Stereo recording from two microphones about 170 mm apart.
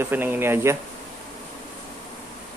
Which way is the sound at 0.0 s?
10° right (ahead or behind).